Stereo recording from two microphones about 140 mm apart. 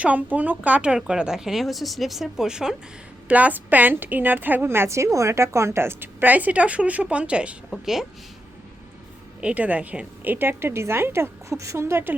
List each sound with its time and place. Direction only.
0.0 s a woman's voice: 10° right (ahead or behind)
9.4 s a woman's voice: 10° right (ahead or behind)